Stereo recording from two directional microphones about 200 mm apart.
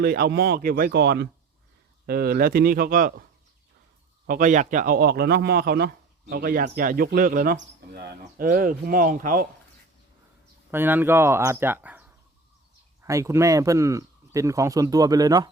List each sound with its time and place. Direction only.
0.0 s a man's voice: 50° right (ahead or behind)
4.3 s a man's voice: 40° right (ahead or behind)
7.5 s a man's voice: 60° right (ahead or behind); by 9.5 s 45° right (ahead or behind)
10.7 s speech: 10° right (ahead or behind)